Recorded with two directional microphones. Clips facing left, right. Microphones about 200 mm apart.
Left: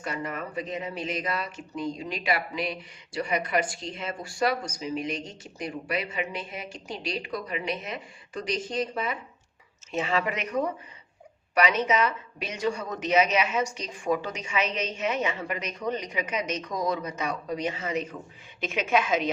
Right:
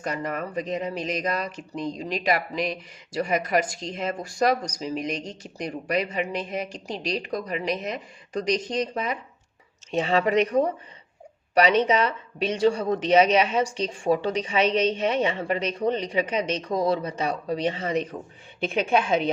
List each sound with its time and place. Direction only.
0.0 s speech: 40° right (ahead or behind)